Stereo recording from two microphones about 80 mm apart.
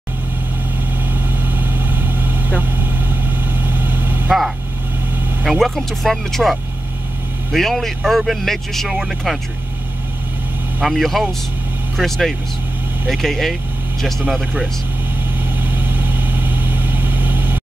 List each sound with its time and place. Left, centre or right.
1.4 s vehicle: right
5.4 s vehicle: centre
5.8 s speech: centre
10.8 s speech: centre
15.6 s vehicle: right